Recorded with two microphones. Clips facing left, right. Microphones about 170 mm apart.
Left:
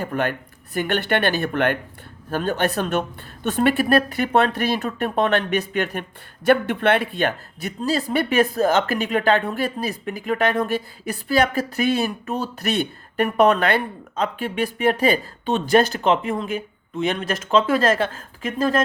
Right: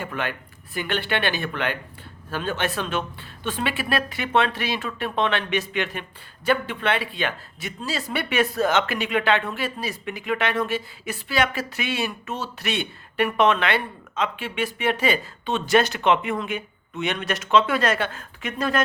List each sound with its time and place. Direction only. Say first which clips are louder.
0.0 s speech: left 5 dB; 45° left (ahead or behind)